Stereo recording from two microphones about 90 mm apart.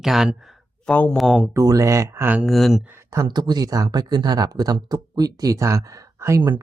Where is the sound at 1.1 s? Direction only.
Centre (ahead or behind).